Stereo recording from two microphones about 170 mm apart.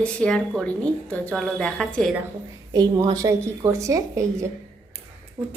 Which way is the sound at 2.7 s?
25° right (ahead or behind).